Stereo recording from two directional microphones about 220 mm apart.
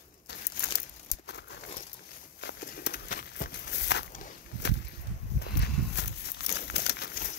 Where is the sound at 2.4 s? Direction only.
50° left (ahead or behind).